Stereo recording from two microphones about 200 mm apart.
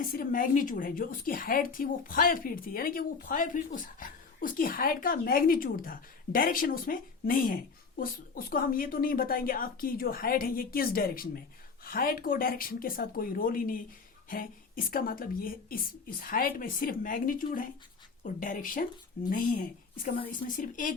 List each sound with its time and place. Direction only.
0.0 s a woman's voice: 45° left (ahead or behind)